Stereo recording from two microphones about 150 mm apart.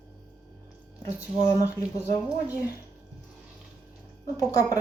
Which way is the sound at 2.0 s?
15° right (ahead or behind).